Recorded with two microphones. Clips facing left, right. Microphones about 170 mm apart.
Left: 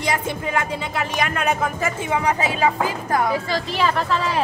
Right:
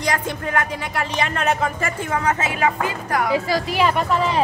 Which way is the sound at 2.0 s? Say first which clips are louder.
Left 1 dB; 15° left (ahead or behind).